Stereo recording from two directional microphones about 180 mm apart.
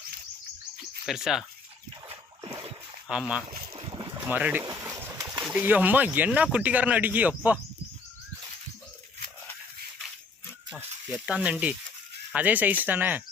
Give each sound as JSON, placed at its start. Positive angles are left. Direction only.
{"t": 1.0, "sound": "speech", "side_deg": 0}
{"t": 2.0, "sound": "dog", "side_deg": -30}
{"t": 3.1, "sound": "speech", "side_deg": -5}
{"t": 3.5, "sound": "boat", "side_deg": -30}
{"t": 4.3, "sound": "pigeon", "side_deg": -10}
{"t": 5.4, "sound": "speech", "side_deg": -5}
{"t": 11.3, "sound": "speech", "side_deg": -5}